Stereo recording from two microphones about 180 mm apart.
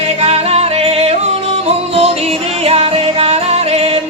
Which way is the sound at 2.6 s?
35° right (ahead or behind).